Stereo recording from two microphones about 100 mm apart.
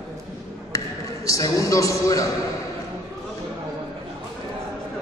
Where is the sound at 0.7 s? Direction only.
35° left (ahead or behind).